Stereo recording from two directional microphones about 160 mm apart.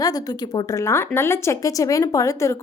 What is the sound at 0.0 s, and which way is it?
A woman's voice, 25° left (ahead or behind).